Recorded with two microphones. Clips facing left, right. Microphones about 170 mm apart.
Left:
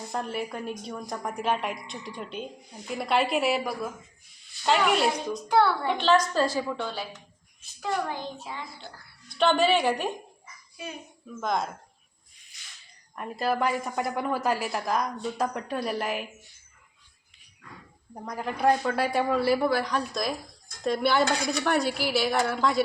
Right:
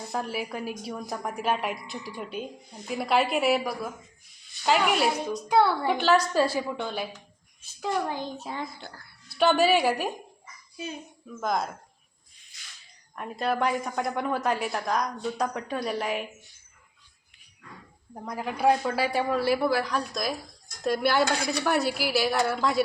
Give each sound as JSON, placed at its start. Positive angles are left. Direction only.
{"t": 0.1, "sound": "a woman's voice", "side_deg": -5}
{"t": 8.4, "sound": "speech", "side_deg": -45}
{"t": 9.4, "sound": "a woman's voice", "side_deg": -5}
{"t": 11.3, "sound": "a woman's voice", "side_deg": 0}
{"t": 13.1, "sound": "a woman's voice", "side_deg": 0}
{"t": 18.1, "sound": "a woman's voice", "side_deg": 0}